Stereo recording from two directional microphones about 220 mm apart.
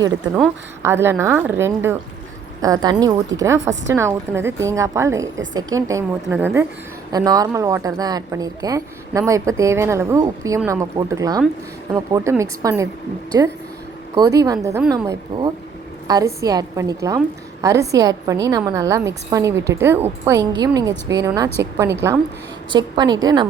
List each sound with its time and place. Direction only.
0.8 s a woman's voice: 10° right (ahead or behind)